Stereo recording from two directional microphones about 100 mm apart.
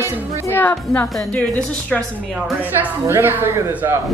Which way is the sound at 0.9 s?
Centre (ahead or behind).